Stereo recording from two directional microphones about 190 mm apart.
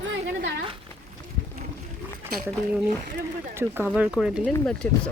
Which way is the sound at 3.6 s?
10° right (ahead or behind).